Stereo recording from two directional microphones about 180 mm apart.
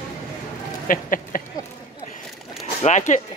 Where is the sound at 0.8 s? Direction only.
50° left (ahead or behind).